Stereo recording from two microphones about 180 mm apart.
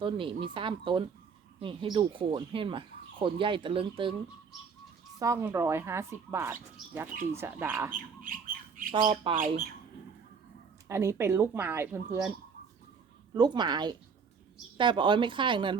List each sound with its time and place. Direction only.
0.0 s speech: 30° right (ahead or behind)
5.2 s speech: 15° right (ahead or behind)
8.8 s speech: 50° right (ahead or behind)
10.8 s speech: 15° right (ahead or behind)
13.3 s speech: 25° right (ahead or behind)